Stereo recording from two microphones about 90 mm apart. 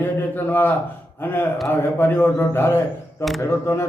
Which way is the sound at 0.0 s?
20° left (ahead or behind).